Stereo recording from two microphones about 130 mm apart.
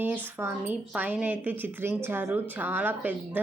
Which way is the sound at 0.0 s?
15° right (ahead or behind).